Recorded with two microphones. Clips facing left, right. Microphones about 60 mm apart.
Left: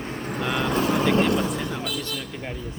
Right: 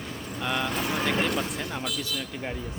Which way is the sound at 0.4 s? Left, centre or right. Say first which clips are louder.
Left 2 dB; centre.